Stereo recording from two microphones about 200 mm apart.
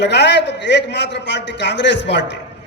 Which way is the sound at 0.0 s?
60° left (ahead or behind).